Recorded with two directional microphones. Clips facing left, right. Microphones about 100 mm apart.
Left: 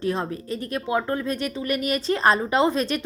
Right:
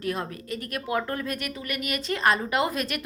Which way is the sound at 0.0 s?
30° left (ahead or behind).